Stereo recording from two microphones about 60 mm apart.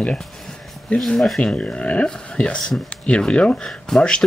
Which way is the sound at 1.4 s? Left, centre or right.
Centre.